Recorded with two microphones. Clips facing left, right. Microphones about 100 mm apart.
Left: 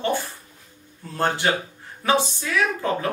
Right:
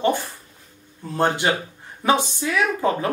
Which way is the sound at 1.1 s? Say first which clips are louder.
Right 2 dB; 20° right (ahead or behind).